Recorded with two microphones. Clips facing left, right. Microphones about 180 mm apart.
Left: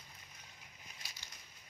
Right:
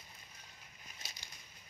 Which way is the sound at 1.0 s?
20° right (ahead or behind).